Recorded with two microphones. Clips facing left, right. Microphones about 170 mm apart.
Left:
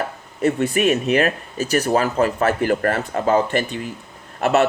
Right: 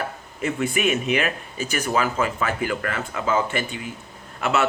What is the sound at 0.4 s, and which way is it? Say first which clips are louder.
Speech: left 5 dB; 40° left (ahead or behind).